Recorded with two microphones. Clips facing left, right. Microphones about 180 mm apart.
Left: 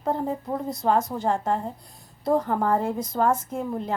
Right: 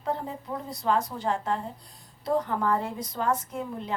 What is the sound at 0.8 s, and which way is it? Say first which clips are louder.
A woman's voice: left 3 dB; 45° left (ahead or behind).